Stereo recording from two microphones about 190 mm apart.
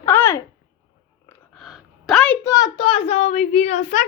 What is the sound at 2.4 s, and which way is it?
A child's voice, 20° left (ahead or behind).